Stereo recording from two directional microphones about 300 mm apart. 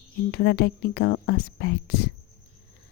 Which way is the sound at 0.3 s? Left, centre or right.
Left.